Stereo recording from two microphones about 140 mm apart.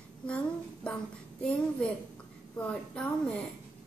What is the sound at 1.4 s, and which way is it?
A woman's voice, 10° left (ahead or behind).